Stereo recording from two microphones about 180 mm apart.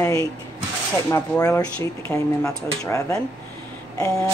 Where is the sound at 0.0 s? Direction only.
15° left (ahead or behind).